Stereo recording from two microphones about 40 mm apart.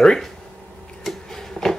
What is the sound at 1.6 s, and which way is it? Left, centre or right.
Music, left.